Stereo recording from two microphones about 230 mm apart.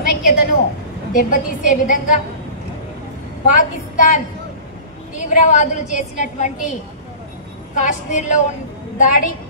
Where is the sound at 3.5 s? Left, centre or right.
Left.